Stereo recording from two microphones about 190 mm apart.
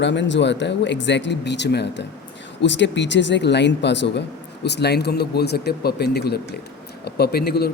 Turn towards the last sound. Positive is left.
turn(degrees=55)  # may be behind; listen again after turning